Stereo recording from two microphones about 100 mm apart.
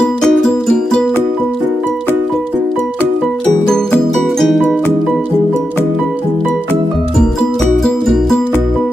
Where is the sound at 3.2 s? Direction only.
Centre (ahead or behind).